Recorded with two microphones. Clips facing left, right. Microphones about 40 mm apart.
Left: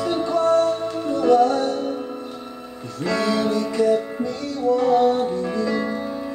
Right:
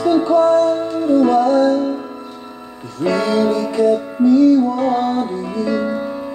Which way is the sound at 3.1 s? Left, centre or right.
Centre.